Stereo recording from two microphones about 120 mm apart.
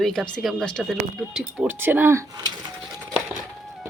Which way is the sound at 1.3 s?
5° right (ahead or behind).